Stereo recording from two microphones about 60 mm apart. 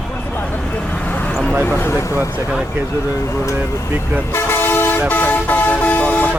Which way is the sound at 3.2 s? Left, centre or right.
Left.